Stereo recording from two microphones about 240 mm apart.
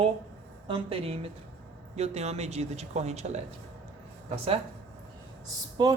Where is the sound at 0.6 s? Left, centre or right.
Right.